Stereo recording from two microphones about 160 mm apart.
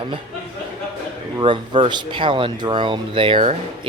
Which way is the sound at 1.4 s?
30° right (ahead or behind).